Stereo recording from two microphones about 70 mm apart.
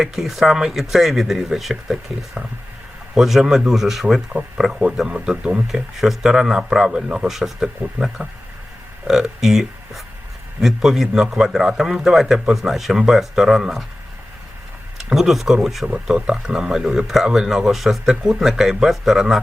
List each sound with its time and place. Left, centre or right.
0.0 s a man's voice: centre
3.2 s a man's voice: centre
4.3 s a man's voice: centre
5.6 s a man's voice: centre
9.0 s a man's voice: centre
14.9 s a man's voice: centre